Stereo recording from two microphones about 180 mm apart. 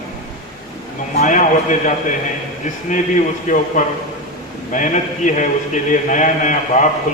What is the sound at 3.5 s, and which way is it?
Speech, 45° left (ahead or behind).